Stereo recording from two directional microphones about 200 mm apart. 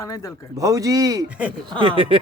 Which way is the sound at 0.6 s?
15° right (ahead or behind).